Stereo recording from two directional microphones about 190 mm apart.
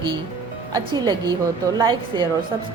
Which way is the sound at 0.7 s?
20° right (ahead or behind).